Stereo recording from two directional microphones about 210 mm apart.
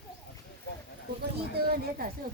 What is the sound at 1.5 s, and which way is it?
Speech, 45° right (ahead or behind).